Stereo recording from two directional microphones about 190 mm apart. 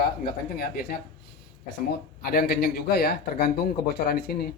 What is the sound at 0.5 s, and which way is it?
Speech, 55° left (ahead or behind).